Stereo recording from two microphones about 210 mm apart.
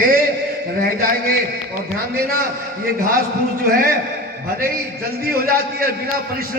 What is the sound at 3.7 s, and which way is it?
Speech, 45° right (ahead or behind).